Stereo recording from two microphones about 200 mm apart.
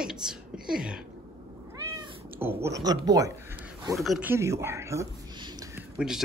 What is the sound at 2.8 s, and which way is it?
Speech, 20° right (ahead or behind).